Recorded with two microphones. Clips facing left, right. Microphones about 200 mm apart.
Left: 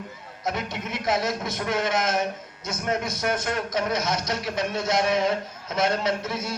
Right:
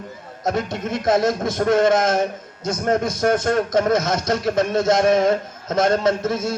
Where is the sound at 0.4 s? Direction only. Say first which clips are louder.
Right 7 dB; 50° right (ahead or behind).